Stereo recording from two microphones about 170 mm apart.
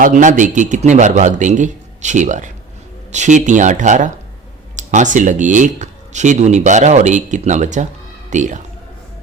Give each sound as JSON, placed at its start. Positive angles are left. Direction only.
{"t": 0.0, "sound": "speech", "side_deg": -50}